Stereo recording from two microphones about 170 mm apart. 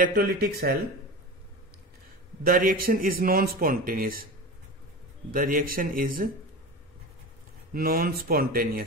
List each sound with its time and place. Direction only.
0.0 s speech: 60° right (ahead or behind)
2.4 s speech: 55° right (ahead or behind)
5.3 s speech: 55° right (ahead or behind)
7.7 s speech: 60° right (ahead or behind)